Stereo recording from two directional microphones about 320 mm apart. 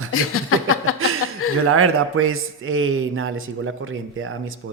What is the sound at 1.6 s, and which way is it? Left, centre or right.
A man's voice, right.